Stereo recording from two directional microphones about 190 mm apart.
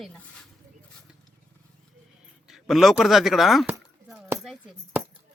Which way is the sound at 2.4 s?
Centre (ahead or behind).